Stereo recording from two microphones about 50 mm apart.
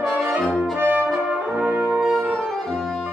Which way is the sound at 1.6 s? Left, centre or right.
Right.